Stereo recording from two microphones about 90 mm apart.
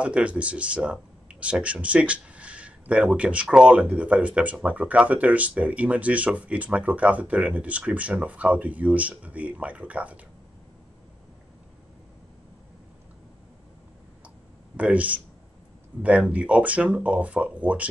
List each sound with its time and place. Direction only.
0.0 s speech: 15° right (ahead or behind)
14.8 s speech: 15° right (ahead or behind)